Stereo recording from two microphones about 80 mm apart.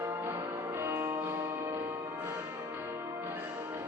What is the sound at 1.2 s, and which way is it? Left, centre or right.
Change ringing, right.